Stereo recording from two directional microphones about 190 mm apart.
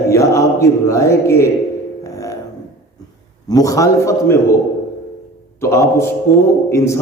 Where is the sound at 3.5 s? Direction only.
20° left (ahead or behind).